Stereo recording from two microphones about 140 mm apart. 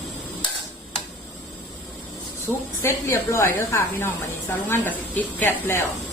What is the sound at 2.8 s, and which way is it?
A woman's voice, 20° left (ahead or behind).